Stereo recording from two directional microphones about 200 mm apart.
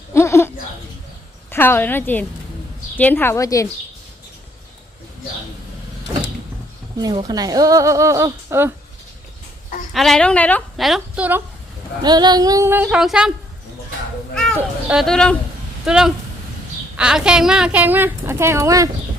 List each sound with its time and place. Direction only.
0.1 s a sound: 15° left (ahead or behind)
1.5 s a woman's voice: 10° left (ahead or behind)
7.0 s speech: 20° right (ahead or behind)
9.6 s a sound: 40° left (ahead or behind)
9.9 s a woman's voice: centre (ahead or behind)
12.0 s speech: 20° right (ahead or behind); by 13.3 s 5° right (ahead or behind)
14.5 s a woman's voice: 5° right (ahead or behind)